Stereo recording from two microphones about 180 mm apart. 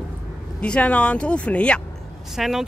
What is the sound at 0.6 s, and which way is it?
Speech, 5° left (ahead or behind).